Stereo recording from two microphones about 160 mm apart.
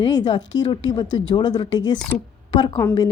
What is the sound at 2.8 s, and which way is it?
Speech, 15° left (ahead or behind).